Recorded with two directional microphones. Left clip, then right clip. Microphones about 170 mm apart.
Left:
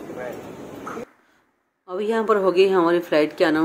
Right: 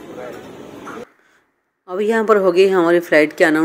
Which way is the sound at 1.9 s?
20° right (ahead or behind).